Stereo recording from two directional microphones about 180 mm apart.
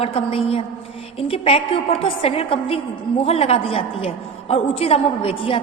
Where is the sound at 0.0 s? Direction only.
30° left (ahead or behind).